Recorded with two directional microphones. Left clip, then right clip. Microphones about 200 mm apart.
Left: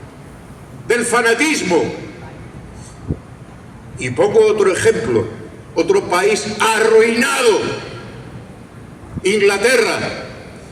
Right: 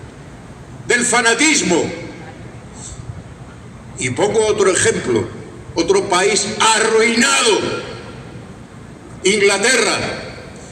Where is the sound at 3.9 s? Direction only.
15° right (ahead or behind).